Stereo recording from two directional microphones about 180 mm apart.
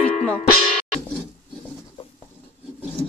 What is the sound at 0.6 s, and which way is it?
Music, 35° left (ahead or behind).